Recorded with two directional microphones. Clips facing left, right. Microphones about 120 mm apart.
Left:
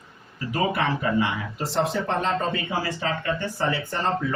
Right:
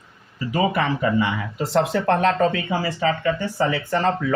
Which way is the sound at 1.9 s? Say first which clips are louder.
Right 6 dB; 85° right.